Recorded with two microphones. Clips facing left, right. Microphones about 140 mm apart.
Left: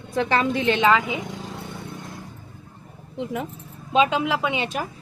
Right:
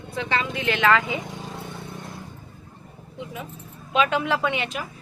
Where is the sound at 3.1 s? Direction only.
60° left (ahead or behind).